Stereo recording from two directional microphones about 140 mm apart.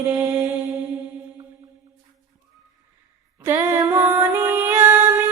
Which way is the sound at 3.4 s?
20° right (ahead or behind).